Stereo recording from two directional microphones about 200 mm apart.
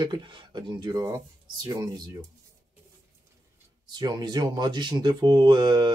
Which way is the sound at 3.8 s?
20° right (ahead or behind).